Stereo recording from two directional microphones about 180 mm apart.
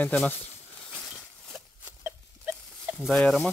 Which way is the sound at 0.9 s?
5° left (ahead or behind).